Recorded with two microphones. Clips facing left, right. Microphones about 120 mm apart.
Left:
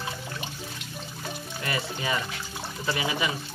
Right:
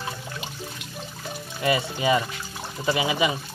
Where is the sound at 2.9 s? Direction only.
15° right (ahead or behind).